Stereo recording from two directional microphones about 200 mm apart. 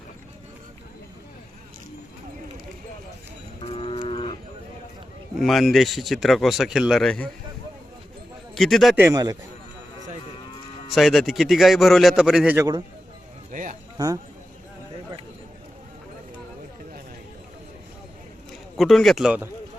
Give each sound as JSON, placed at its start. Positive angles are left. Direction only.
{"t": 3.6, "sound": "cattle", "side_deg": 30}
{"t": 5.4, "sound": "speech", "side_deg": 0}
{"t": 8.5, "sound": "speech", "side_deg": 0}
{"t": 10.9, "sound": "speech", "side_deg": 0}
{"t": 13.5, "sound": "speech", "side_deg": -40}
{"t": 14.0, "sound": "speech", "side_deg": -20}
{"t": 18.8, "sound": "speech", "side_deg": 0}